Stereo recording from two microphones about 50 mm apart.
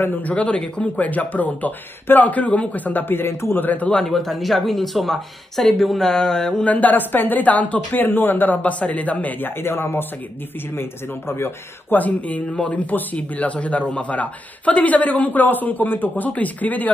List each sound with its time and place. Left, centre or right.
0.0 s speech: left
0.3 s speech: left
3.6 s speech: left
4.1 s speech: centre
6.6 s speech: left
8.6 s speech: left
9.6 s a man's voice: left
12.0 s speech: left